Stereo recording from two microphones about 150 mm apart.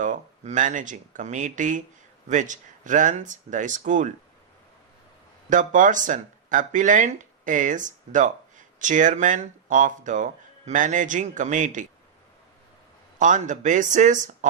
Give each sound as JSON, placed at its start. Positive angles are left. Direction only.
{"t": 0.0, "sound": "speech", "side_deg": -60}
{"t": 5.5, "sound": "speech", "side_deg": -60}
{"t": 13.1, "sound": "speech", "side_deg": -60}